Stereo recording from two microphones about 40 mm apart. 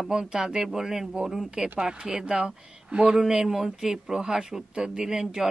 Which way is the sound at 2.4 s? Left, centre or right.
Right.